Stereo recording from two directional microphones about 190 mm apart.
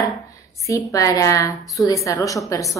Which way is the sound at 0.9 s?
20° left (ahead or behind).